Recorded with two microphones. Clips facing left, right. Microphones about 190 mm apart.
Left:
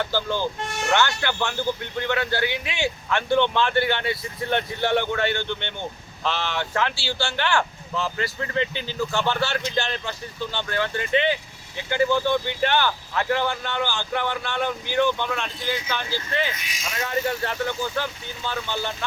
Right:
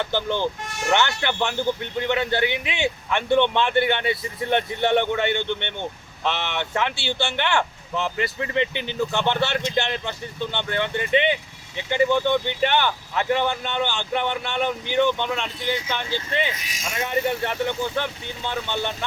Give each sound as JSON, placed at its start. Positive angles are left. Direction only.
{"t": 0.0, "sound": "speech", "side_deg": -20}
{"t": 16.6, "sound": "speech", "side_deg": -40}
{"t": 17.0, "sound": "speech", "side_deg": -20}